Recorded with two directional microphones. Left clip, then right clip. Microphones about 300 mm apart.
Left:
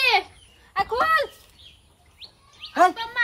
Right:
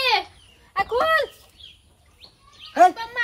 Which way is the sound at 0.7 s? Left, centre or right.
Centre.